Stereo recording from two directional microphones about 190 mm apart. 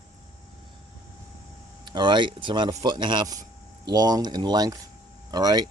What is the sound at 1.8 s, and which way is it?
Speech, 25° right (ahead or behind).